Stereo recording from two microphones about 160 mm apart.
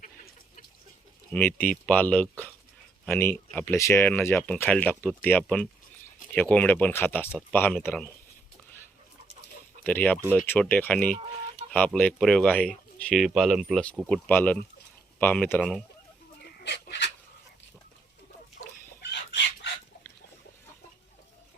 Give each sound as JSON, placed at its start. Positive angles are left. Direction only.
{"t": 1.3, "sound": "speech", "side_deg": 10}
{"t": 9.8, "sound": "speech", "side_deg": 10}
{"t": 14.1, "sound": "speech", "side_deg": 10}
{"t": 16.6, "sound": "a sound", "side_deg": 90}
{"t": 19.1, "sound": "chicken", "side_deg": 90}